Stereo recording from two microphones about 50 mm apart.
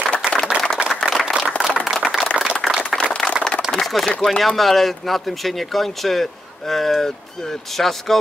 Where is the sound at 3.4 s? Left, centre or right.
Centre.